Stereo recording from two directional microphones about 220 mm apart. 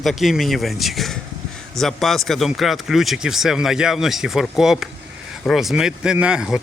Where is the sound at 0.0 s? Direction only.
Centre (ahead or behind).